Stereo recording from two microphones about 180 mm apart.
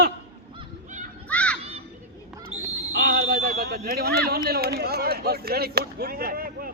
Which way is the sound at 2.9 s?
60° right (ahead or behind).